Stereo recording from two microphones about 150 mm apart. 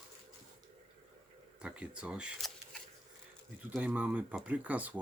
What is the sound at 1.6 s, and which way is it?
Speech, 5° right (ahead or behind).